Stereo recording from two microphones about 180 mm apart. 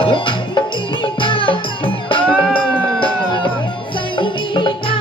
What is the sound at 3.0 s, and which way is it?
Music, 25° left (ahead or behind).